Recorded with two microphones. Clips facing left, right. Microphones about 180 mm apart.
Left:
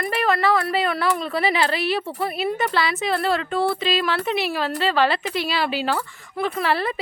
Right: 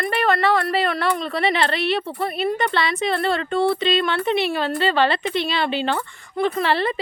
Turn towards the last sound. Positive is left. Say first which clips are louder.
# right 2 dB
turn(degrees=0)  # may be behind; listen again after turning